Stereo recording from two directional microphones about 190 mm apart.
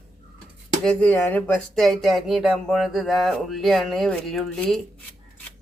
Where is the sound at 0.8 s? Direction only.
5° left (ahead or behind).